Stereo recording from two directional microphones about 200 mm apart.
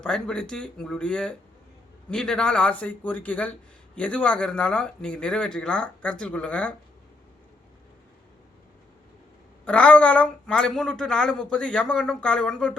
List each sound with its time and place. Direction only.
0.0 s a man's voice: 5° left (ahead or behind)
9.6 s speech: 5° left (ahead or behind)